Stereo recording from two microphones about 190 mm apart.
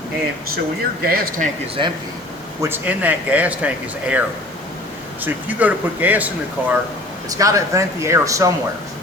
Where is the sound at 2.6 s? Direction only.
10° right (ahead or behind).